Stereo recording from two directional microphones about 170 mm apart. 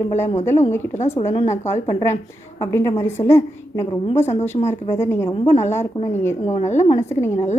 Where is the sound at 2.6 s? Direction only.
20° left (ahead or behind).